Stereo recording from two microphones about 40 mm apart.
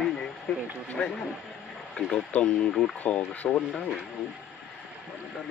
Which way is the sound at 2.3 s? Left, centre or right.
Left.